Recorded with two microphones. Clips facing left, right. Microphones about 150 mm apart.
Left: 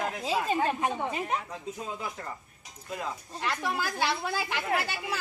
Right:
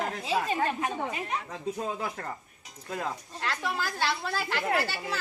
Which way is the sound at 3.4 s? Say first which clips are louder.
Left 2 dB; 10° left (ahead or behind).